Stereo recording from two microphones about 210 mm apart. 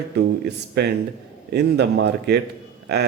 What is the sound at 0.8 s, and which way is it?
A man's voice, 55° right (ahead or behind).